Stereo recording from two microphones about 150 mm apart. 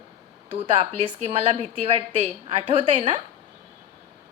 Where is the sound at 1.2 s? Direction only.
40° right (ahead or behind).